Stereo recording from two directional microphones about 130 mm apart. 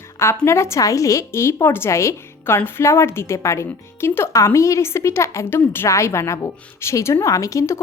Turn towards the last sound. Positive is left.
turn(degrees=25)  # may be behind; listen again after turning